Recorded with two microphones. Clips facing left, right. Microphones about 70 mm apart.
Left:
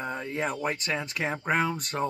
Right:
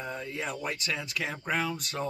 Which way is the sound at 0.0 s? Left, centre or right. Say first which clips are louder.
Left 4 dB; left.